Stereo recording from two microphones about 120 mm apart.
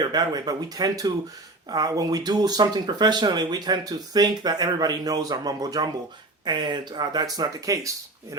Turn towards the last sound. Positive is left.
turn(degrees=-25)  # may be behind; listen again after turning